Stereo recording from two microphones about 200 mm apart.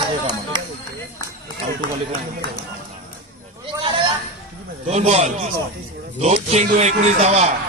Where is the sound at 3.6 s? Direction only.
25° right (ahead or behind).